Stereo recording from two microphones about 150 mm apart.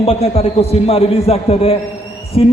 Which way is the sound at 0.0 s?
40° left (ahead or behind).